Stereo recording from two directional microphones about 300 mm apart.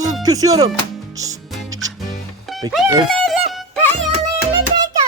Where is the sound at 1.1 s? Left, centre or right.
Centre.